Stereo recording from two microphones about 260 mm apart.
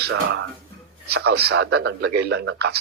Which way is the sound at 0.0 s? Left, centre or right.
Right.